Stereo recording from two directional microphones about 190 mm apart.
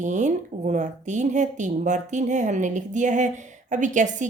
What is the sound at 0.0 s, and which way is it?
A woman's voice, 40° right (ahead or behind).